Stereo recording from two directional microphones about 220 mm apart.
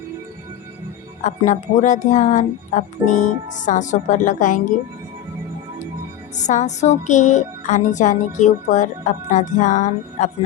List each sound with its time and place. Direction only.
1.2 s music: 35° left (ahead or behind)
6.3 s music: 35° left (ahead or behind)